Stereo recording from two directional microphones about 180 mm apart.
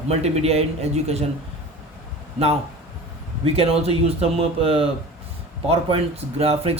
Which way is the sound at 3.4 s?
35° right (ahead or behind).